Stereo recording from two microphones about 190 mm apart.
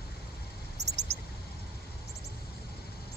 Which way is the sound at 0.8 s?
60° right (ahead or behind).